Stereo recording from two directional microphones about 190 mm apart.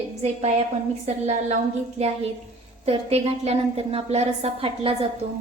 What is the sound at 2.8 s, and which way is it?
A woman's voice, 30° right (ahead or behind).